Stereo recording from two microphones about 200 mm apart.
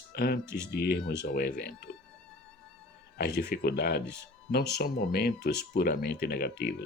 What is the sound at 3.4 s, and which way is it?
Speech, 50° left (ahead or behind).